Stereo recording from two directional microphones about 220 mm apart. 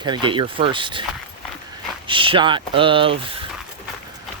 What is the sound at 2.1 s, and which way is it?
Speech, 20° right (ahead or behind).